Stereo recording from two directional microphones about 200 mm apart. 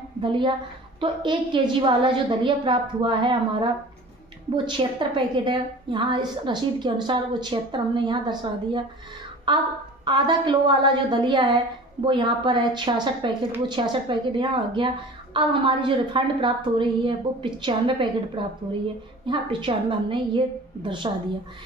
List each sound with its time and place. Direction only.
0.2 s a woman's voice: 25° right (ahead or behind)